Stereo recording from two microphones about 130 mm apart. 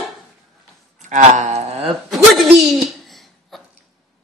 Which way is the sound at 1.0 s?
65° right (ahead or behind).